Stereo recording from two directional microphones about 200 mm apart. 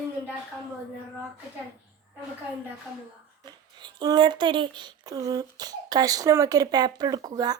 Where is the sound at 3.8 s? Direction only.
20° right (ahead or behind).